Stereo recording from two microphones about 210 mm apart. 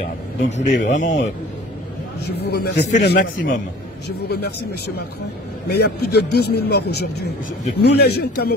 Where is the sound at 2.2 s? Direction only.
50° left (ahead or behind).